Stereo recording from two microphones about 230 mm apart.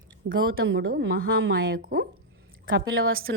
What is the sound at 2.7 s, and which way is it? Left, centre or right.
Speech, right.